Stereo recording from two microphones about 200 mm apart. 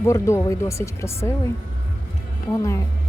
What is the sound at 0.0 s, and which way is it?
Speech, 15° left (ahead or behind).